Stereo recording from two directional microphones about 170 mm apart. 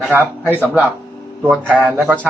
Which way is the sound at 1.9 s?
10° right (ahead or behind).